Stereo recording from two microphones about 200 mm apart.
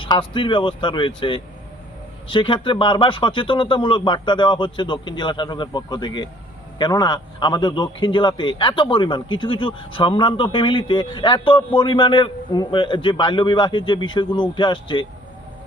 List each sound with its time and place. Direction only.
0.0 s speech: 25° left (ahead or behind)